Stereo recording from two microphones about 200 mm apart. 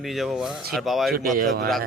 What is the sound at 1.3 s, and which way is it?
Speech, 45° right (ahead or behind).